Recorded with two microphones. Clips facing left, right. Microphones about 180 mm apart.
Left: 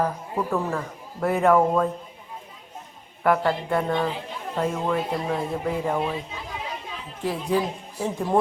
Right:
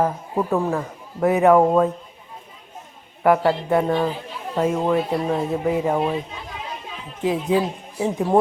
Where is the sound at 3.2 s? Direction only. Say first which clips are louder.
Right 4 dB; 10° right (ahead or behind).